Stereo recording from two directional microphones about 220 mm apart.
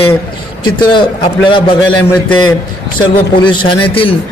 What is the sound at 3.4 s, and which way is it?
Speech, 20° left (ahead or behind).